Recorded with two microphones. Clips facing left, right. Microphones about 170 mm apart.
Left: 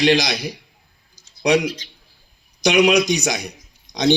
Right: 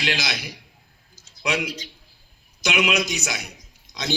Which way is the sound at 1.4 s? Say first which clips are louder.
Left 9 dB; 35° left (ahead or behind).